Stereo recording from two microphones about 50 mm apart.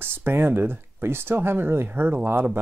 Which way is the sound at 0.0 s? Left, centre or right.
Right.